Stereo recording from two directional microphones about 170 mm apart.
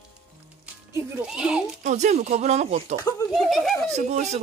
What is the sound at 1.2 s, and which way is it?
Speech, 5° right (ahead or behind).